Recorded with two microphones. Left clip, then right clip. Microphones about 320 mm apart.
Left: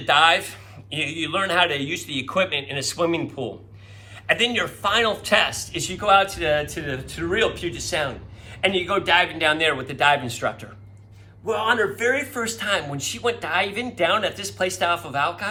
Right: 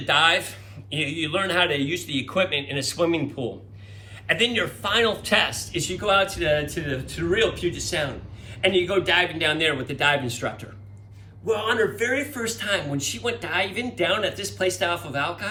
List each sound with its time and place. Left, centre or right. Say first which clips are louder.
0.0 s a man's voice: left 3 dB; centre